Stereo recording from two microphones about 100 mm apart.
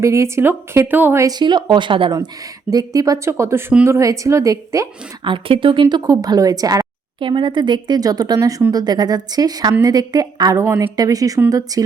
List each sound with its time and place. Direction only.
0.0 s a woman's voice: 30° right (ahead or behind)
1.2 s speech: 45° right (ahead or behind)
2.6 s speech: 35° right (ahead or behind)
5.2 s speech: 55° right (ahead or behind); by 6.8 s 35° right (ahead or behind)
7.2 s speech: 55° right (ahead or behind); by 11.8 s 35° right (ahead or behind)